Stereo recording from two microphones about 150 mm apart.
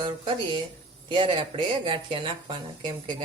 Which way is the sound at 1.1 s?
30° right (ahead or behind).